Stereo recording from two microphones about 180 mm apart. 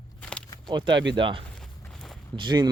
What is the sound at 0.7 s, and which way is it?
Speech, 25° right (ahead or behind).